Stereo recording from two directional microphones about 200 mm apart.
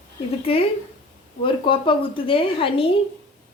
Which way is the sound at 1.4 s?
25° left (ahead or behind).